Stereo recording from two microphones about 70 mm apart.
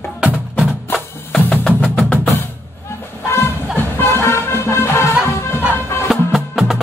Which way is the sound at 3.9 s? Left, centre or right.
Left.